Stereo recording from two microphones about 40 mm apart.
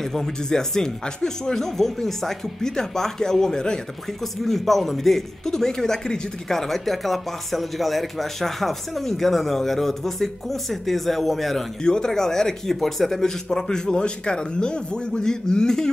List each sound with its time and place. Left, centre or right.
0.0 s speech: centre
4.2 s speech: centre
11.8 s speech: centre